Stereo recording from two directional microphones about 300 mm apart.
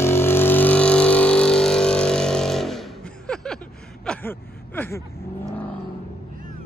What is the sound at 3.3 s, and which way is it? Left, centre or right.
Chuckle, centre.